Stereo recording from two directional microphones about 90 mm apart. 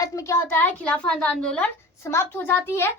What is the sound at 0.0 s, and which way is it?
Speech, 40° left (ahead or behind).